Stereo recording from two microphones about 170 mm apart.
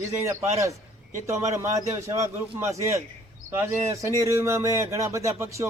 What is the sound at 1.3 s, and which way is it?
Speech, 15° right (ahead or behind).